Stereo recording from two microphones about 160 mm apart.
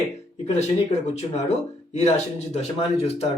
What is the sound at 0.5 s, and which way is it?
Speech, 45° left (ahead or behind).